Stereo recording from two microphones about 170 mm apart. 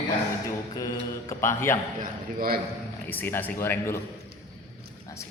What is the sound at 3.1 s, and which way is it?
Speech, 10° left (ahead or behind).